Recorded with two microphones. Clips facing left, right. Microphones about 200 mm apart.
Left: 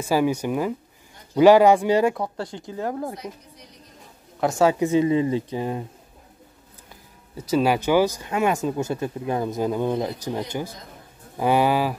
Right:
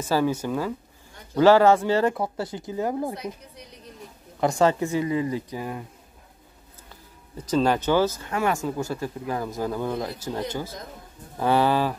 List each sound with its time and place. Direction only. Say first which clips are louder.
0.0 s speech: left 2 dB; 15° left (ahead or behind)
2.1 s speech: right 1 dB; 5° right (ahead or behind)
4.4 s speech: left 1 dB; 5° left (ahead or behind)
4.7 s speech: left 5 dB; 20° left (ahead or behind)
7.3 s speech: left 1 dB; 10° left (ahead or behind)